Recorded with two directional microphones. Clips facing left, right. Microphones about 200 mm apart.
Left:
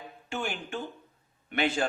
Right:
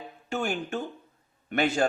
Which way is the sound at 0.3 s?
45° right (ahead or behind).